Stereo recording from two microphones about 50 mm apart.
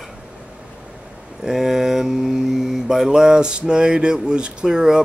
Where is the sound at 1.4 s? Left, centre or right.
Centre.